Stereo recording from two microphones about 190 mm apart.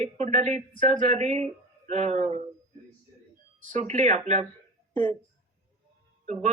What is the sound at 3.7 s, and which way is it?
Speech, 35° right (ahead or behind).